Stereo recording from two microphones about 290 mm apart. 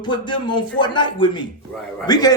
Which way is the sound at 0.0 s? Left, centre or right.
Centre.